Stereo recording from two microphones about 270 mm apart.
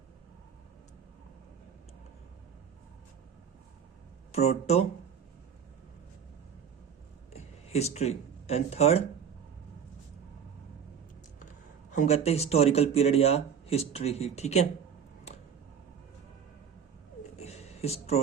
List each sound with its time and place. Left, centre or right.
4.3 s speech: left
7.3 s speech: left
11.9 s speech: left
17.3 s a sound: left